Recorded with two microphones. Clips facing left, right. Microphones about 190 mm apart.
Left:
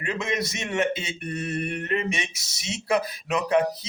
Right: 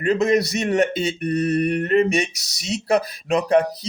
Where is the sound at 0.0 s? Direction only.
40° right (ahead or behind).